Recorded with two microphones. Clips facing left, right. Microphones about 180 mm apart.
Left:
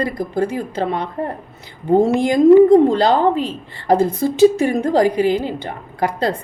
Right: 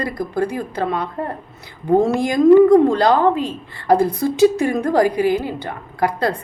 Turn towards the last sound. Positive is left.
turn(degrees=20)  # may be behind; listen again after turning